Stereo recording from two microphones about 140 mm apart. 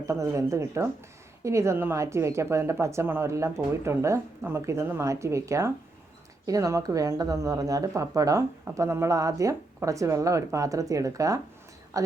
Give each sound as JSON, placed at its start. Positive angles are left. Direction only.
{"t": 0.0, "sound": "speech", "side_deg": -20}